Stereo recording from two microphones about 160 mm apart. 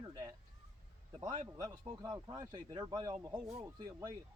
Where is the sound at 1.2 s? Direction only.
25° right (ahead or behind).